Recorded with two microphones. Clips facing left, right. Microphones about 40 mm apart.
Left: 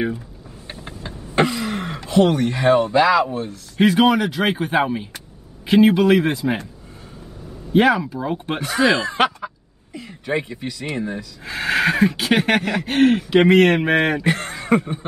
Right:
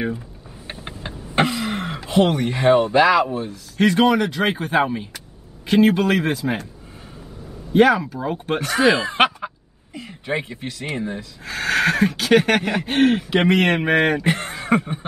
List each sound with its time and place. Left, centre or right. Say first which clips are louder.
1.3 s throat clearing: left 1 dB; centre
2.2 s speech: even; centre
3.7 s speech: left 1 dB; centre
7.7 s speech: right 1 dB; centre
8.9 s a sound: right 1 dB; right
9.9 s speech: left 2 dB; centre
11.4 s speech: even; centre
12.6 s speech: left 1 dB; centre
14.3 s chuckle: left 1 dB; centre